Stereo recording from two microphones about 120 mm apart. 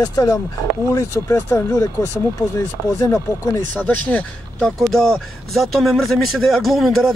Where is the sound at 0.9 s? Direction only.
20° left (ahead or behind).